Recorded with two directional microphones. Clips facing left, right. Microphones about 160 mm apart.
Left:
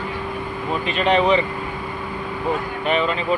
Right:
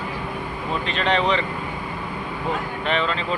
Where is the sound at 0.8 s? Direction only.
10° left (ahead or behind).